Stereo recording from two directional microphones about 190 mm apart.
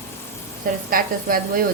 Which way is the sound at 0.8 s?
50° right (ahead or behind).